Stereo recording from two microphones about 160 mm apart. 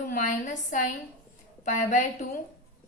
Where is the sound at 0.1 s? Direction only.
55° left (ahead or behind).